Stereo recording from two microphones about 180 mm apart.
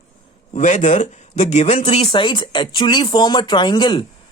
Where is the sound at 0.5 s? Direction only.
40° left (ahead or behind).